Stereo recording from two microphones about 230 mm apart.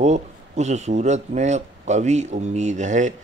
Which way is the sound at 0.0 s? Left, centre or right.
Right.